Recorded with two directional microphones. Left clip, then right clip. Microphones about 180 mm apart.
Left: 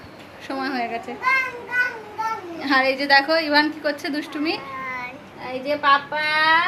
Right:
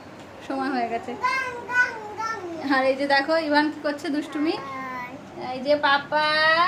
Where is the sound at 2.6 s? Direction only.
5° left (ahead or behind).